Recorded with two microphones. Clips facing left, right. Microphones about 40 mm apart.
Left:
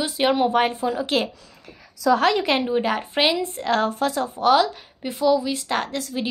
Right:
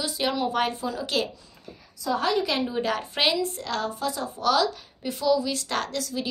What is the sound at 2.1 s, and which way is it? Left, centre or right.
Speech, left.